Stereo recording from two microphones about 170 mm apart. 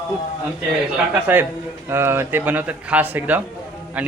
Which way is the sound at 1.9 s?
15° right (ahead or behind).